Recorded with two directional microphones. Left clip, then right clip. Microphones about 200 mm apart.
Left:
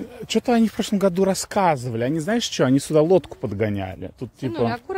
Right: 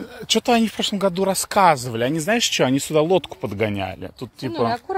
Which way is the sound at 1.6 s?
15° left (ahead or behind).